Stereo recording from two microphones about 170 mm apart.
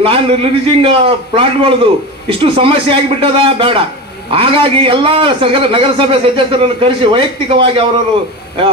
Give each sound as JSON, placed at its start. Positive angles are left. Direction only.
{"t": 0.0, "sound": "a man's voice", "side_deg": -35}